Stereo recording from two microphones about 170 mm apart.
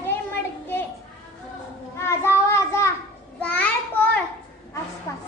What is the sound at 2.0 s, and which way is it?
Child singing, 15° left (ahead or behind).